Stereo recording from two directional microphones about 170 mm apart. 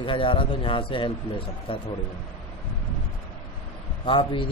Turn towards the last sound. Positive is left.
turn(degrees=30)  # may be behind; listen again after turning